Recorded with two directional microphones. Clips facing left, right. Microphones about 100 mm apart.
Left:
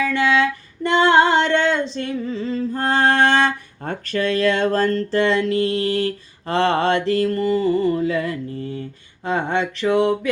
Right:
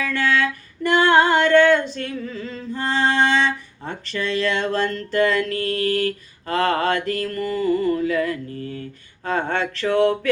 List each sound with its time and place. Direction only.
0.0 s music: 20° left (ahead or behind)
2.7 s music: 50° left (ahead or behind); by 8.8 s 25° left (ahead or behind)
9.2 s a sound: 20° left (ahead or behind)